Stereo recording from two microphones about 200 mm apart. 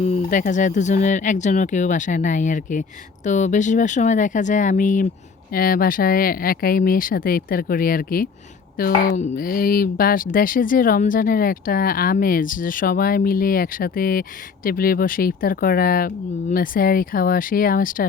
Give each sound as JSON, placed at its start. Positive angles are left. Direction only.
{"t": 0.0, "sound": "speech", "side_deg": 40}